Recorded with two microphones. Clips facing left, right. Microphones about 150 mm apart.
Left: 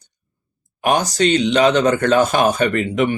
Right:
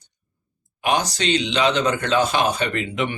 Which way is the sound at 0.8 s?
45° left (ahead or behind).